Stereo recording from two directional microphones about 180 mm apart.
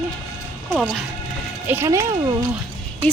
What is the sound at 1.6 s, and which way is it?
Speech, 15° right (ahead or behind).